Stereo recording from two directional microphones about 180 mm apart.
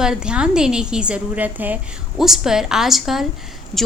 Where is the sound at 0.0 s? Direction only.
5° right (ahead or behind).